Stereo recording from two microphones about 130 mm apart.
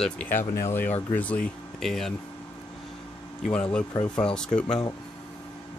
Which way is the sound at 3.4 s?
5° left (ahead or behind).